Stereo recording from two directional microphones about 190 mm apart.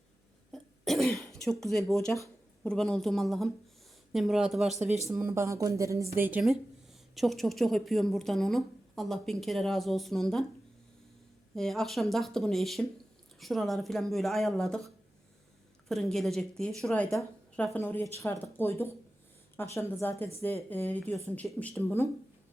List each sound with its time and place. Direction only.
0.5 s cough: centre (ahead or behind)
1.4 s a woman's voice: centre (ahead or behind)
5.1 s a woman's voice: 15° right (ahead or behind)
11.5 s a woman's voice: centre (ahead or behind)
15.9 s a woman's voice: centre (ahead or behind)